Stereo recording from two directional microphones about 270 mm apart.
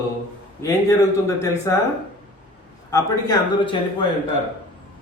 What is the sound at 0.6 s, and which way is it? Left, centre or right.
A man's voice, centre.